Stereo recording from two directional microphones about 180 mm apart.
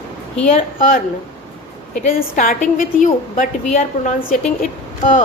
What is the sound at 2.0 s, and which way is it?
A woman's voice, 50° left (ahead or behind).